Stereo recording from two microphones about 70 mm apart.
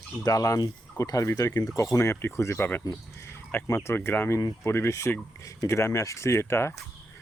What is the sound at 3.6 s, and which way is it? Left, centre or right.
Speech, left.